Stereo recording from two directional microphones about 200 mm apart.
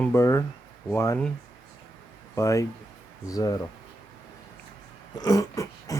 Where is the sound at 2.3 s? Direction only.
15° left (ahead or behind).